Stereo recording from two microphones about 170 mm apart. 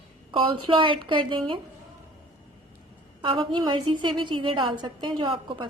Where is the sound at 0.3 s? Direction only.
30° right (ahead or behind).